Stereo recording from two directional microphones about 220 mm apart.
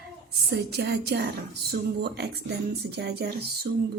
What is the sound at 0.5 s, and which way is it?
A woman's voice, 50° right (ahead or behind).